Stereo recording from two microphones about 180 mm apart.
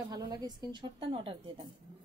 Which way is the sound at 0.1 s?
20° right (ahead or behind).